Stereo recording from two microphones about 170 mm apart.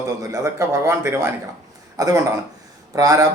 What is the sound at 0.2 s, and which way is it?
Speech, 20° right (ahead or behind).